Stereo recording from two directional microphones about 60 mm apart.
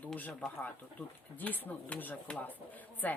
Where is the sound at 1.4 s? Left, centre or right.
Left.